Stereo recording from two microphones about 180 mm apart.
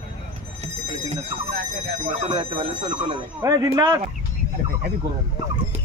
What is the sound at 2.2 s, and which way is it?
Speech, 35° right (ahead or behind).